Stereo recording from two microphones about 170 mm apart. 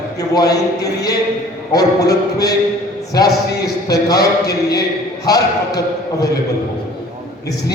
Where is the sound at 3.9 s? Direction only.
20° left (ahead or behind).